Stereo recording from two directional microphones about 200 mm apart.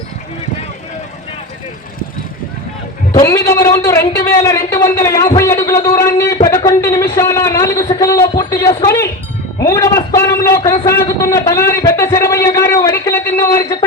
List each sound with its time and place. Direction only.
3.2 s a man's voice: 15° left (ahead or behind)